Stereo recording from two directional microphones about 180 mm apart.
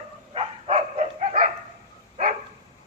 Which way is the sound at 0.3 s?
40° right (ahead or behind).